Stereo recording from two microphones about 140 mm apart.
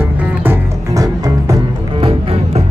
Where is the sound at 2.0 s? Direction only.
45° right (ahead or behind).